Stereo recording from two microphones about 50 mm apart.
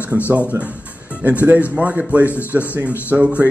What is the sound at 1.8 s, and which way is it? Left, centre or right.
Speech, right.